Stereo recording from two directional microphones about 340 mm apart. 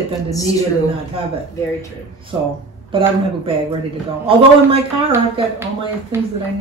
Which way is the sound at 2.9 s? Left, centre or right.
Centre.